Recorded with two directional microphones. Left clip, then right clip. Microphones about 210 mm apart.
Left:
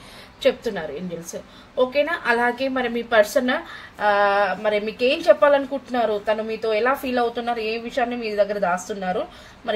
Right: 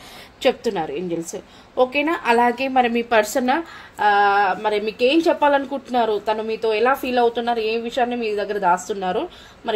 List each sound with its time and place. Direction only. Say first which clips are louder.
0.4 s a woman's voice: right 2 dB; 40° right (ahead or behind)
2.0 s a woman's voice: right 2 dB; 40° right (ahead or behind)